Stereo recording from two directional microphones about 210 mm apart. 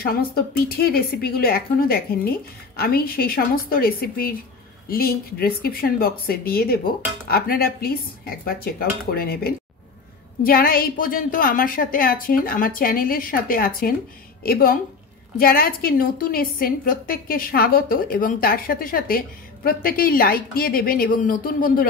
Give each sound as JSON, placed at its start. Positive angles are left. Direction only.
{"t": 0.0, "sound": "a woman's voice", "side_deg": 45}